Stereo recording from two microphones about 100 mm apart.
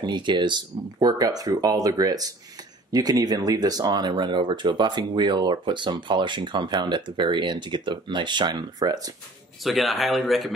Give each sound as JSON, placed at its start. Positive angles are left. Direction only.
{"t": 0.0, "sound": "speech", "side_deg": -50}
{"t": 9.6, "sound": "speech", "side_deg": 0}